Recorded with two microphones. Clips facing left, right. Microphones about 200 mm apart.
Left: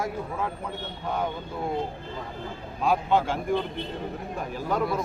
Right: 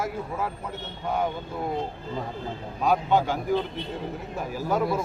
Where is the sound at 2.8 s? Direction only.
Centre (ahead or behind).